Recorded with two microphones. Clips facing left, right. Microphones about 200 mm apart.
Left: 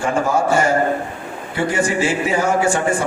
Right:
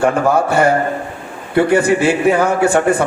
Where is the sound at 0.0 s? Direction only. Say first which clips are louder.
Right 4 dB; 60° right (ahead or behind).